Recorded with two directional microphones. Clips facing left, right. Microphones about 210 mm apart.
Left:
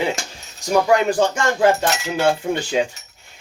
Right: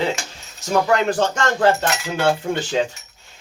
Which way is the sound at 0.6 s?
10° left (ahead or behind).